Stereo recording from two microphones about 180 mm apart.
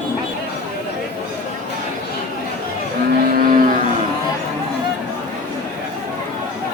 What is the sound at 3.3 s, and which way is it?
Vehicle, 50° right (ahead or behind).